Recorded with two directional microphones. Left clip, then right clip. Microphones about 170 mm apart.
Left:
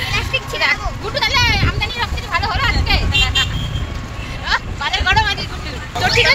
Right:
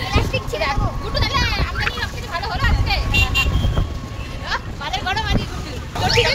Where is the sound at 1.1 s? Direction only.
35° left (ahead or behind).